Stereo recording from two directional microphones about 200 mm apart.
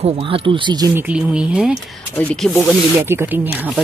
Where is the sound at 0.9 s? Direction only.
5° right (ahead or behind).